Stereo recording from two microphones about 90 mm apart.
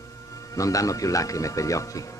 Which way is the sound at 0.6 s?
40° left (ahead or behind).